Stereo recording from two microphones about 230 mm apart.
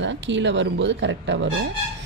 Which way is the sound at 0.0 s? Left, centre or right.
Right.